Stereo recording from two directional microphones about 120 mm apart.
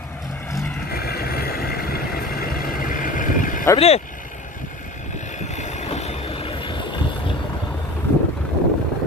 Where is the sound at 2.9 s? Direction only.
90° left.